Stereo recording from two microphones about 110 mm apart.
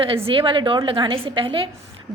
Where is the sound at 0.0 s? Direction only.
60° right (ahead or behind).